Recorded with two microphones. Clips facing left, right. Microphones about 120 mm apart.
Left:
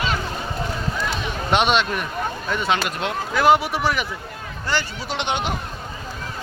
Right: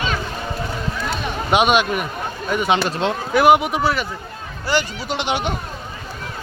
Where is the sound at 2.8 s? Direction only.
20° right (ahead or behind); by 5.4 s 5° right (ahead or behind).